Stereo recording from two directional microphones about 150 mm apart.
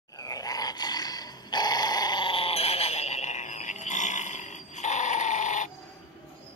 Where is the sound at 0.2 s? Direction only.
25° left (ahead or behind); by 5.7 s 55° left (ahead or behind).